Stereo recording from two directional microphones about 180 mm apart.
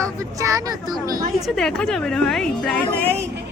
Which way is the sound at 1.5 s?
5° left (ahead or behind).